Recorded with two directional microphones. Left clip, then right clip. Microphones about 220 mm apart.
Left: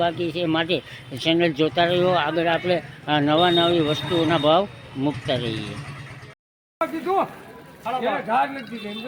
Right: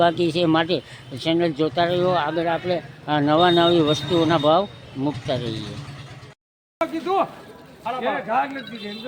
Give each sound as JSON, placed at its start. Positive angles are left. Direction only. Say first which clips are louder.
{"t": 0.0, "sound": "speech", "louder": "right 4 dB", "side_deg": -20}
{"t": 6.7, "sound": "a man's voice", "louder": "right 1 dB", "side_deg": 40}